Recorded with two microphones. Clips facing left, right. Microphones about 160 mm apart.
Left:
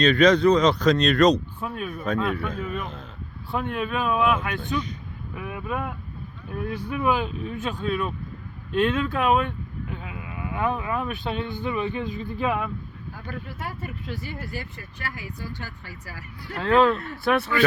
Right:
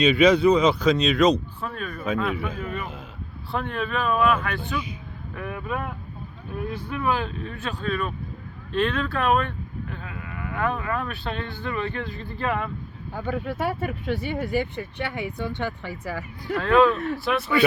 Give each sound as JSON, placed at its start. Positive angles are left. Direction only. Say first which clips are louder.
{"t": 0.0, "sound": "speech", "louder": "even", "side_deg": -5}
{"t": 3.5, "sound": "speech", "louder": "even", "side_deg": 10}
{"t": 6.9, "sound": "speech", "louder": "left 2 dB", "side_deg": 15}
{"t": 13.1, "sound": "speech", "louder": "right 10 dB", "side_deg": -70}
{"t": 16.6, "sound": "speech", "louder": "right 1 dB", "side_deg": 25}
{"t": 17.2, "sound": "speech", "louder": "left 3 dB", "side_deg": 60}